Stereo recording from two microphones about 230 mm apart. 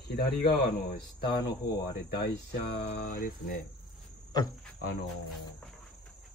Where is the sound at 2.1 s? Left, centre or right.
Left.